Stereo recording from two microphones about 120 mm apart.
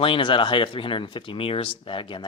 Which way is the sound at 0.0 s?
45° left (ahead or behind).